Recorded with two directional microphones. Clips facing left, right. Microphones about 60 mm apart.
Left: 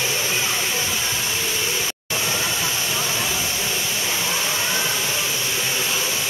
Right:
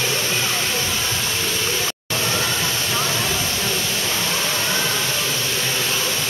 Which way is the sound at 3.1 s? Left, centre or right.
Centre.